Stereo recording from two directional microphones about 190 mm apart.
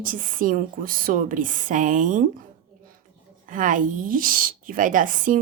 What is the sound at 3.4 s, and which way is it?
A woman's voice, 45° right (ahead or behind).